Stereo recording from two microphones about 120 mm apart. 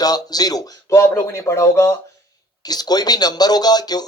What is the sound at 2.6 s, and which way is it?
Speech, 35° left (ahead or behind).